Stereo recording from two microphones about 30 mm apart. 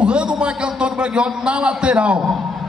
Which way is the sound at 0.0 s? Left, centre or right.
Right.